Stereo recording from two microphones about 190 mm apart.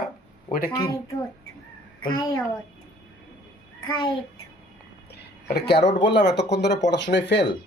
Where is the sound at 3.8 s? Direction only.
25° left (ahead or behind).